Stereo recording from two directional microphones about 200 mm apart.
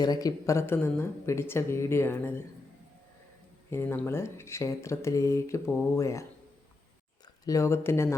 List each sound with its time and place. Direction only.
0.0 s speech: 20° left (ahead or behind)
3.7 s speech: 10° left (ahead or behind)
7.4 s speech: 15° left (ahead or behind)